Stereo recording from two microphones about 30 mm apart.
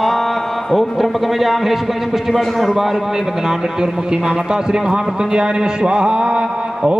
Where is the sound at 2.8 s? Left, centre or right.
Centre; by 6.9 s right.